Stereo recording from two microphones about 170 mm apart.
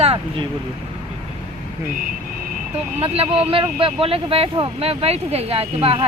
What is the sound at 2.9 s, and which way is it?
Speech, 35° right (ahead or behind).